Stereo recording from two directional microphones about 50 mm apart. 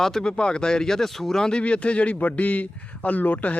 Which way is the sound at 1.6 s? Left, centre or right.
Left.